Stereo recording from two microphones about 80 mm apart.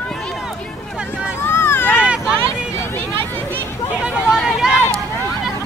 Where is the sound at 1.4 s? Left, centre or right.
Left.